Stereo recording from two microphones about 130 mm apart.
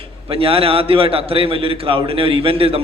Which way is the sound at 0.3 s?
45° right (ahead or behind).